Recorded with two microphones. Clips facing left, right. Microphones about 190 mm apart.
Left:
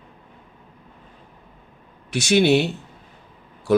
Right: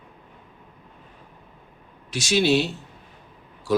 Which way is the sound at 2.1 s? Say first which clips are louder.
Left 4 dB; 55° left (ahead or behind).